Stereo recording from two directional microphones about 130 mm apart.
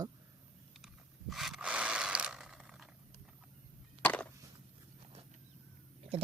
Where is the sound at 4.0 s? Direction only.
10° left (ahead or behind).